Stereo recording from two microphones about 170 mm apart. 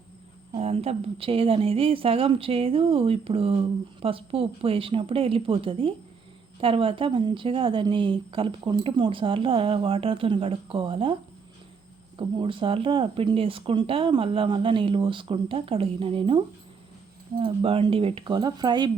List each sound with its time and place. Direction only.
0.5 s speech: 40° right (ahead or behind)